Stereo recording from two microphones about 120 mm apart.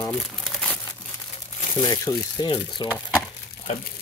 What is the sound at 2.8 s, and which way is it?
Wood, 35° left (ahead or behind).